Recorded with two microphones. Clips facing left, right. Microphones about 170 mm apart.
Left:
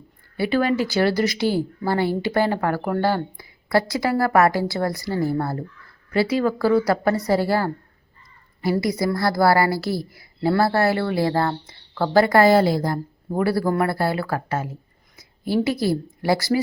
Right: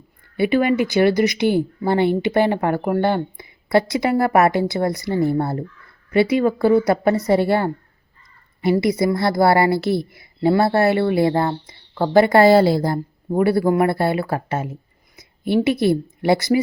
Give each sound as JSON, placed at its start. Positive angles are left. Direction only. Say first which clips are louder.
{"t": 0.3, "sound": "speech", "louder": "right 3 dB", "side_deg": -20}